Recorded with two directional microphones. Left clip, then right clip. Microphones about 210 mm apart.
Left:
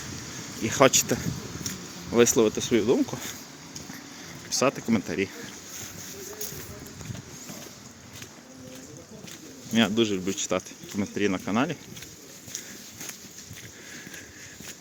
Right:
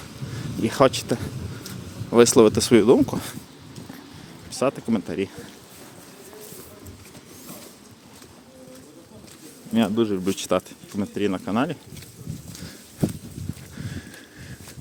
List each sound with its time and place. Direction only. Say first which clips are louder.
0.6 s speech: right 1 dB; 25° right (ahead or behind)
2.1 s speech: right 6 dB; 30° right (ahead or behind)
4.4 s speech: right 1 dB; 10° right (ahead or behind)
9.7 s speech: right 1 dB; 20° right (ahead or behind)
10.2 s speech: right 5 dB; 35° right (ahead or behind)
10.9 s speech: right 2 dB; 15° right (ahead or behind)